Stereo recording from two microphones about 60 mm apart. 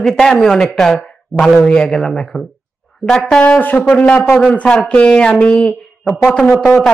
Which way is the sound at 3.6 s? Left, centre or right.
Left.